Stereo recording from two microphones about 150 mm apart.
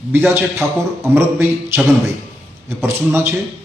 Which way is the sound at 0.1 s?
10° right (ahead or behind).